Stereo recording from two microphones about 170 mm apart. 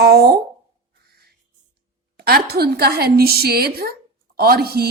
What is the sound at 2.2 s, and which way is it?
A woman's voice, 65° right (ahead or behind).